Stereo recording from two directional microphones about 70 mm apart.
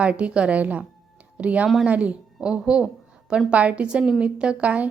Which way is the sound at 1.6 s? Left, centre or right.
Centre.